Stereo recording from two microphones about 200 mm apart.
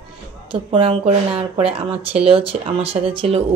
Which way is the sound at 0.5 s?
25° right (ahead or behind).